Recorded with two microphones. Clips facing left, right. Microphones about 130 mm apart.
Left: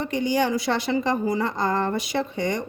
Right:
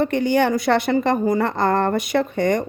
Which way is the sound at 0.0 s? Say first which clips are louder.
Right 5 dB; 60° right (ahead or behind).